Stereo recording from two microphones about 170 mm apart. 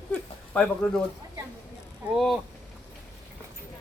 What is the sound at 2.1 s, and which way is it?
Speech, centre (ahead or behind).